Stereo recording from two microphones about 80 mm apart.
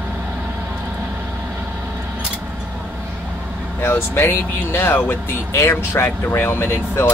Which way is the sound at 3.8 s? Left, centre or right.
Left.